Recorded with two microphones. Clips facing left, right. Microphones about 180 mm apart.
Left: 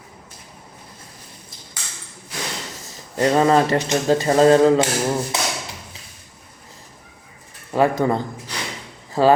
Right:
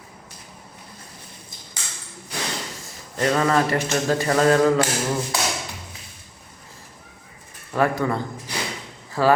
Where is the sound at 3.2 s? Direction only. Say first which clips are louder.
Left 4 dB; 25° left (ahead or behind).